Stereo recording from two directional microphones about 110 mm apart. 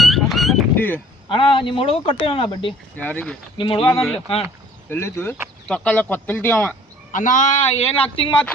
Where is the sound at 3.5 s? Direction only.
50° left (ahead or behind).